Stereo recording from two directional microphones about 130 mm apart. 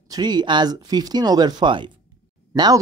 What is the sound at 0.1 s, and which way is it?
Speech, 35° right (ahead or behind).